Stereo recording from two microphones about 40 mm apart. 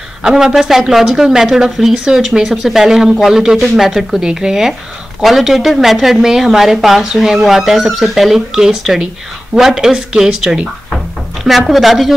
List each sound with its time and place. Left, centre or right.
0.2 s speech: centre